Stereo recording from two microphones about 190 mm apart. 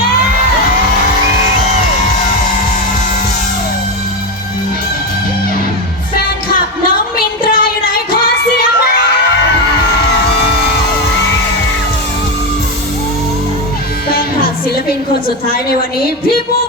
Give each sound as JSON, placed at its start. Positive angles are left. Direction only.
{"t": 6.8, "sound": "music", "side_deg": 50}
{"t": 14.1, "sound": "music", "side_deg": 50}